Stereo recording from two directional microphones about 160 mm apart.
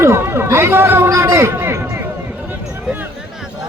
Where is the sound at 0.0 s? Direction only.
15° right (ahead or behind).